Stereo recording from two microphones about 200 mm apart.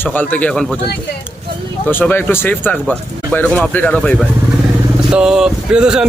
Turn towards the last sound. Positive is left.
turn(degrees=-5)  # may be behind; listen again after turning